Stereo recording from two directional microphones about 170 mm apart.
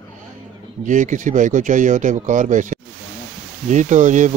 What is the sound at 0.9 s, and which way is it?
Speech, 50° right (ahead or behind).